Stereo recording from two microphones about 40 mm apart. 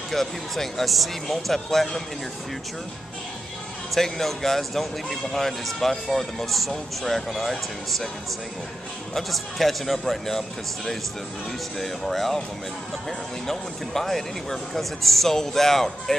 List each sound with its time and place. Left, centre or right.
0.1 s speech: centre
3.9 s speech: centre
9.1 s speech: centre
11.8 s speech: centre
13.5 s speech: centre